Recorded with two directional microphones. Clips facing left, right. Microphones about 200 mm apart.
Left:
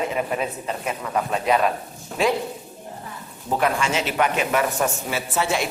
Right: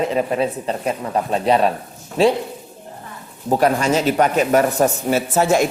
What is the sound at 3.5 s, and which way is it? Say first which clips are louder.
Speech: right 6 dB; 40° right (ahead or behind).